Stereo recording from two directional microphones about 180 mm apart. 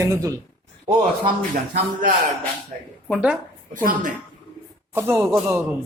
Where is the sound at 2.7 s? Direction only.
45° right (ahead or behind).